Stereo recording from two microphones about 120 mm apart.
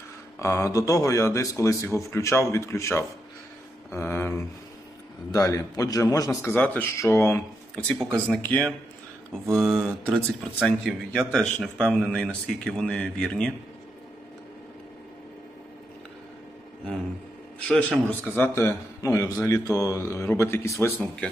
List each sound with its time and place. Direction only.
0.4 s a man's voice: 25° left (ahead or behind)
5.3 s a man's voice: 25° left (ahead or behind)
6.5 s speech: 15° left (ahead or behind)
9.5 s speech: 5° right (ahead or behind)
17.6 s speech: 10° left (ahead or behind)
18.3 s a man's voice: 15° left (ahead or behind)